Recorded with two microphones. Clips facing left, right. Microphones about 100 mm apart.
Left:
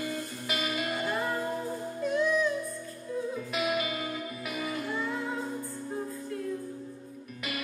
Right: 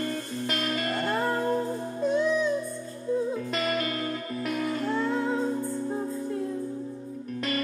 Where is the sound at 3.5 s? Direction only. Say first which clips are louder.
Even; 5° left (ahead or behind).